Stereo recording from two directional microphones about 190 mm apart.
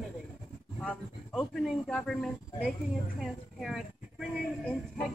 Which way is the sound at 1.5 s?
Centre (ahead or behind).